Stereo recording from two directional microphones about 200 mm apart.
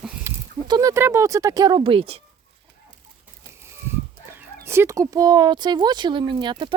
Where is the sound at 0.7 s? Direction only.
20° right (ahead or behind).